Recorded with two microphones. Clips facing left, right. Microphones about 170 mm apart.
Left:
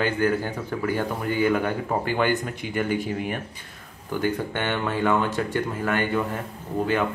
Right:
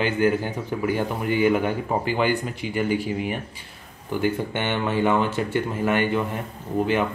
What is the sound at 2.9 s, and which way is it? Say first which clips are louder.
Speech: right 2 dB; 50° left (ahead or behind).